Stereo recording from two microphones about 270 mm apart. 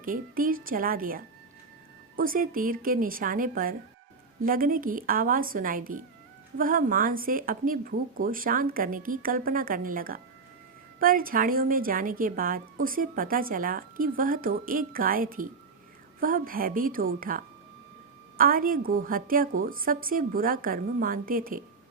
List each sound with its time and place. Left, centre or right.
0.0 s a woman's voice: right